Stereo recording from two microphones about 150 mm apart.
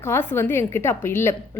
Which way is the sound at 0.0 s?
15° left (ahead or behind).